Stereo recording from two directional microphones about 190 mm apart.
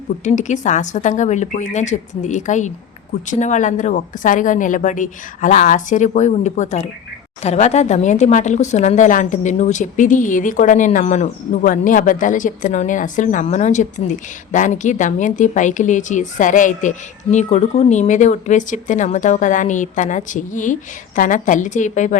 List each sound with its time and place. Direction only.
0.3 s a woman's voice: 40° left (ahead or behind)